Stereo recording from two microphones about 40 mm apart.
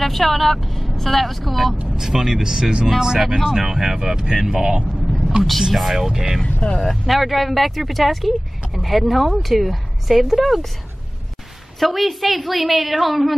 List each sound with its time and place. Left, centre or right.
0.0 s speech: centre
2.0 s speech: centre
3.2 s speech: centre
3.4 s speech: centre
5.4 s speech: centre
6.4 s speech: left
6.9 s speech: centre
11.8 s speech: centre